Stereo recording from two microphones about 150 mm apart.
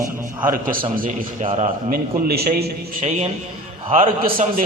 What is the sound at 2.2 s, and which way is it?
Speech, 90° right.